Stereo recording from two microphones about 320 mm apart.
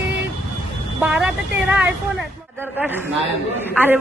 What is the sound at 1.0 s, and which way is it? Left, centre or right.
A woman's voice, centre.